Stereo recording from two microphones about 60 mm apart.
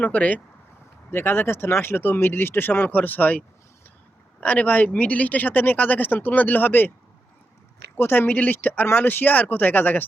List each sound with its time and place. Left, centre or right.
0.0 s speech: left
1.1 s speech: left
7.9 s speech: left
8.3 s speech: left